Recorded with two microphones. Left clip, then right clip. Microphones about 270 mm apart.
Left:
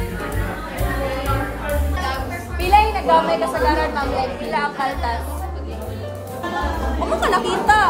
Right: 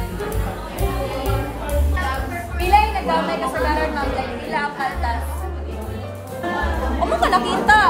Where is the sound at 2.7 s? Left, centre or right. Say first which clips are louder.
Left 1 dB; centre.